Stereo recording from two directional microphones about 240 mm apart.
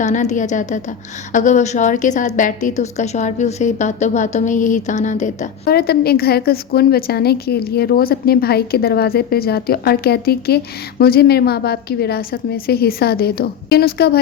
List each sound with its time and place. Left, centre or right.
0.0 s a woman's voice: left